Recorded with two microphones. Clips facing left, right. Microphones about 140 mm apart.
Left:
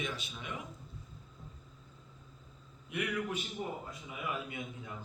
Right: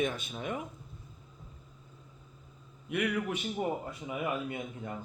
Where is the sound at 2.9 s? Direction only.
65° right (ahead or behind).